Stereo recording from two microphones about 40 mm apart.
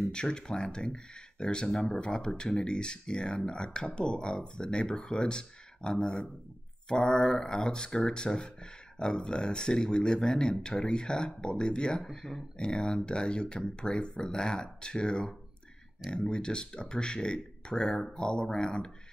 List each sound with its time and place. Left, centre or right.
0.1 s speech: left
12.0 s speech: centre
12.5 s speech: left